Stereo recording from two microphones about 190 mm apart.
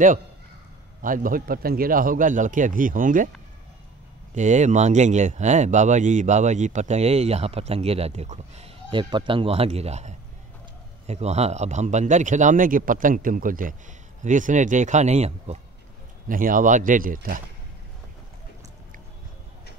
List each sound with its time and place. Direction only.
1.0 s speech: 45° right (ahead or behind)
4.4 s speech: 40° right (ahead or behind)
16.3 s speech: 45° right (ahead or behind)